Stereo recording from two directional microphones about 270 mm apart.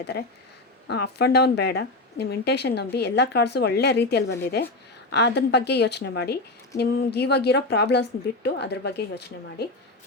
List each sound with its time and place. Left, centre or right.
0.9 s speech: left